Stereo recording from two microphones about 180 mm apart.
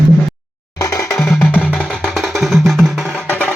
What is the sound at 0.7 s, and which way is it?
Music, 20° left (ahead or behind).